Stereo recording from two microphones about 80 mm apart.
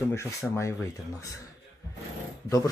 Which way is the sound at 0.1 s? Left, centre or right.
Left.